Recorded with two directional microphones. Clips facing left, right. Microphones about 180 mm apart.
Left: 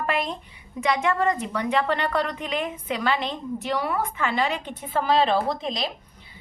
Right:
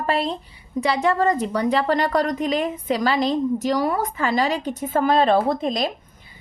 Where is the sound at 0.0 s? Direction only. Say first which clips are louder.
Right 4 dB; 30° right (ahead or behind).